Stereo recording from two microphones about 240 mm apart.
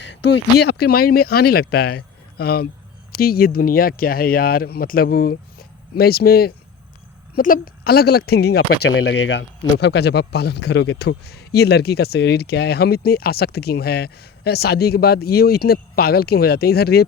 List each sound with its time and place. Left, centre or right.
0.2 s speech: left